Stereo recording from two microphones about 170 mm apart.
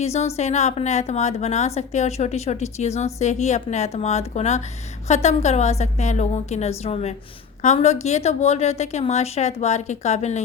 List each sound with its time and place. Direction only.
0.0 s a woman's voice: 40° left (ahead or behind)